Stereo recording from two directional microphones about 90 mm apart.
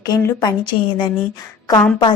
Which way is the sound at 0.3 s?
40° left (ahead or behind).